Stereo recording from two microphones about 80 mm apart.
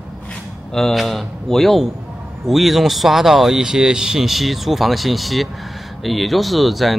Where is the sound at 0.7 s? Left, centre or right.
Centre.